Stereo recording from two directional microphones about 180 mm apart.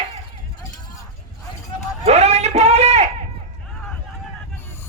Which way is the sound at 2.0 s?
35° right (ahead or behind).